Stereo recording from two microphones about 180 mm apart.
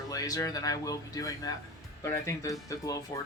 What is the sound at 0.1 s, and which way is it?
Speech, 20° left (ahead or behind).